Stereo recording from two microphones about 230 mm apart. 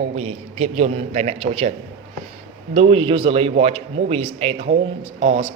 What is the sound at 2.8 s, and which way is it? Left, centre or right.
Speech, right.